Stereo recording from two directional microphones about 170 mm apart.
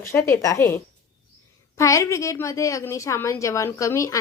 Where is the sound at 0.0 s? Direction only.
15° left (ahead or behind).